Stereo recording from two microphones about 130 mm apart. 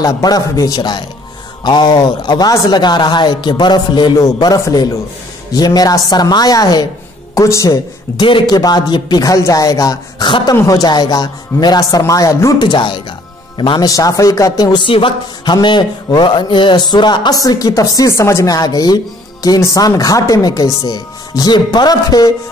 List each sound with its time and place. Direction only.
0.0 s a man's voice: 30° left (ahead or behind)
8.2 s a man's voice: 40° left (ahead or behind)
12.6 s a man's voice: 35° left (ahead or behind)